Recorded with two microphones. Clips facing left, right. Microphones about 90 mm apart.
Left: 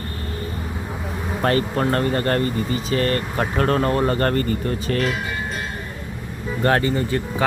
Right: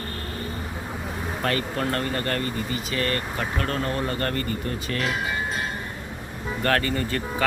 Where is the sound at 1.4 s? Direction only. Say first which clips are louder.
Left 7 dB; 35° left (ahead or behind).